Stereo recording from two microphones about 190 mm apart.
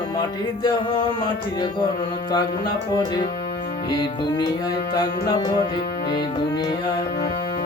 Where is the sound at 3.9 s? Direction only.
20° left (ahead or behind).